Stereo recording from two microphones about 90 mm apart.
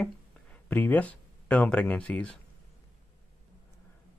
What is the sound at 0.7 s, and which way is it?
Speech, 20° left (ahead or behind).